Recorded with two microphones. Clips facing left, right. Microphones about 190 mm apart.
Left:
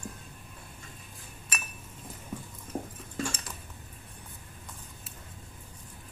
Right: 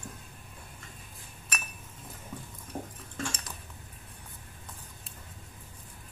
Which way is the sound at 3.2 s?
5° left (ahead or behind).